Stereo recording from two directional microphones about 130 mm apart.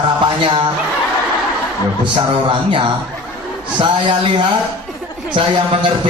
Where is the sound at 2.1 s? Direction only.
40° right (ahead or behind).